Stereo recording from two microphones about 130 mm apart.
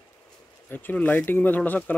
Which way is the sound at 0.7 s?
15° left (ahead or behind).